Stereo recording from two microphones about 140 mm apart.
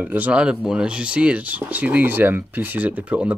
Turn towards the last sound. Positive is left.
turn(degrees=-10)  # may be behind; listen again after turning